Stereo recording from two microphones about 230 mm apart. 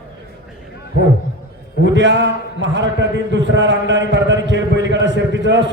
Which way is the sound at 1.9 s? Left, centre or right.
Right.